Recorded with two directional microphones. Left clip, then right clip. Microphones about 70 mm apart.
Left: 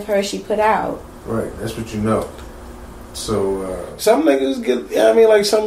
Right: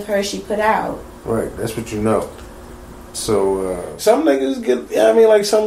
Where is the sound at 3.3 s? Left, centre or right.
Right.